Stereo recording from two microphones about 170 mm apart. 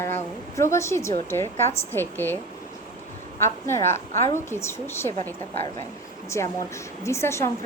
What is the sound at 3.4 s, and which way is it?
A woman's voice, 15° left (ahead or behind).